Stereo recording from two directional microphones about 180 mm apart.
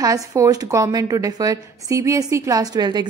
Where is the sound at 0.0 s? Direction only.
20° right (ahead or behind).